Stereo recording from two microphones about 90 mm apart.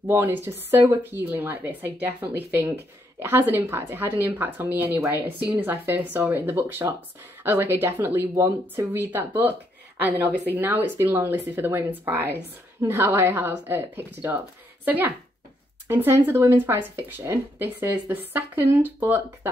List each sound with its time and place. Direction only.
0.1 s speech: 25° right (ahead or behind)